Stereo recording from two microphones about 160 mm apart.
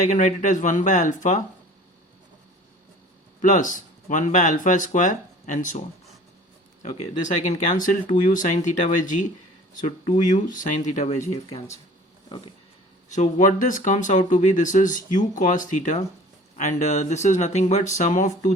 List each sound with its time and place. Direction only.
0.0 s speech: 50° left (ahead or behind)
3.4 s speech: 55° left (ahead or behind)
7.2 s speech: 50° left (ahead or behind)
13.1 s speech: 50° left (ahead or behind)